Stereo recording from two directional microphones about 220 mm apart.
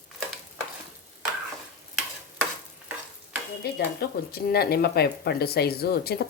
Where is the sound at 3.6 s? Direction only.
45° left (ahead or behind).